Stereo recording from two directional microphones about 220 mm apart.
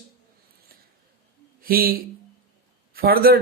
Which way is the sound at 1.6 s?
40° right (ahead or behind).